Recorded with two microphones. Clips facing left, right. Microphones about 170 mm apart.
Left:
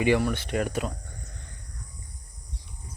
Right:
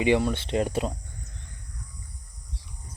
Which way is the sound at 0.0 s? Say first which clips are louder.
Right 1 dB; 20° right (ahead or behind).